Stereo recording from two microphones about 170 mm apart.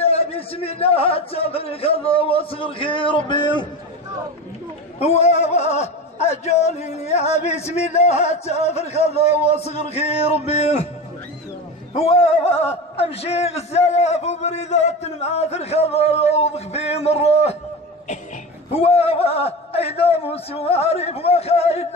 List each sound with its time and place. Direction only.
0.0 s a man's voice: 35° left (ahead or behind)
4.9 s a man's voice: 40° left (ahead or behind)
11.9 s a man's voice: 40° left (ahead or behind)
18.7 s a man's voice: 35° left (ahead or behind)